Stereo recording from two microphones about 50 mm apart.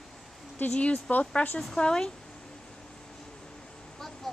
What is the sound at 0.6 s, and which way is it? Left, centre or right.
Speech, left.